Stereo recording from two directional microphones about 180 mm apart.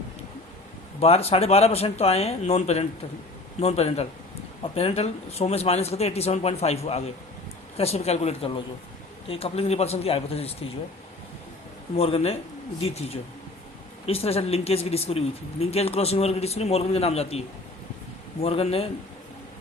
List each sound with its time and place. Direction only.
0.9 s speech: 35° left (ahead or behind)
11.9 s speech: 35° left (ahead or behind)